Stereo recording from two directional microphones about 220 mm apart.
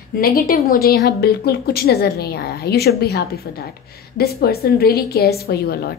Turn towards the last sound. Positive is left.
turn(degrees=45)  # may be behind; listen again after turning